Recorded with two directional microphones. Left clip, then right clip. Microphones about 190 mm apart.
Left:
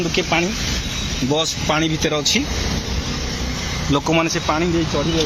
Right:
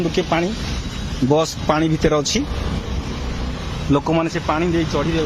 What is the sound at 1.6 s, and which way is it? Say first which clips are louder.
Speech: right 1 dB; 25° right (ahead or behind).